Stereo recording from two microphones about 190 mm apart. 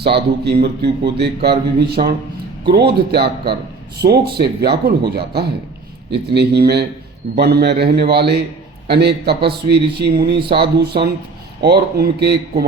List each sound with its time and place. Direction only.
0.0 s speech: 60° right (ahead or behind)
11.6 s speech: 55° right (ahead or behind)